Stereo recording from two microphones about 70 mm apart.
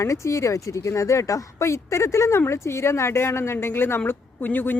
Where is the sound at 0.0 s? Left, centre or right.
Left.